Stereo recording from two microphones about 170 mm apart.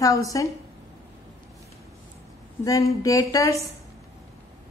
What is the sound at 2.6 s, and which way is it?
Female singing, 20° left (ahead or behind).